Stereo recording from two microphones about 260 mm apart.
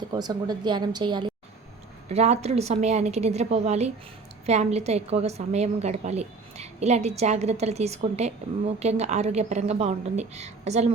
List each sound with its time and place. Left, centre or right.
0.1 s a woman's voice: centre